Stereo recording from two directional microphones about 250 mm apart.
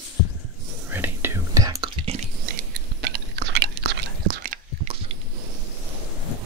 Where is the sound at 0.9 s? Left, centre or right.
Centre.